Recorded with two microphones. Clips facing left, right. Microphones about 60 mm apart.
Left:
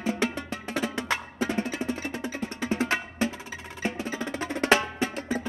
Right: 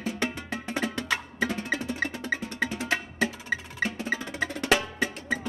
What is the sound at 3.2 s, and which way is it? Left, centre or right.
Music, right.